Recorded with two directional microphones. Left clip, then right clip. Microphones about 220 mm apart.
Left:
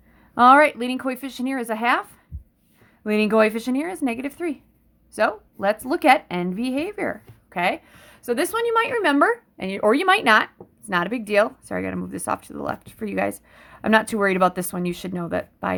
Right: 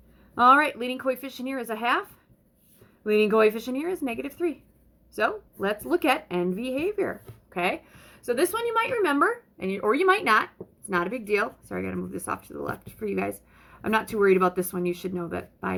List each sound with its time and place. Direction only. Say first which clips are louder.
0.3 s speech: left 5 dB; 45° left (ahead or behind)